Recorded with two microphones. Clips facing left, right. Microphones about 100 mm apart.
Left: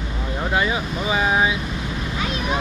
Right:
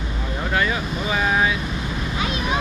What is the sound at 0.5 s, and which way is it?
Speech, 15° left (ahead or behind).